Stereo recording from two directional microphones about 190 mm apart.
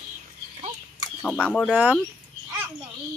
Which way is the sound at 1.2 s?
5° left (ahead or behind).